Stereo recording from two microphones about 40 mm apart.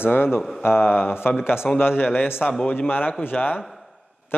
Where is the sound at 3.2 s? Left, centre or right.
Left.